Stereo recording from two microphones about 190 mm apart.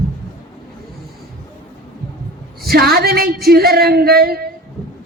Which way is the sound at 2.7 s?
55° right (ahead or behind).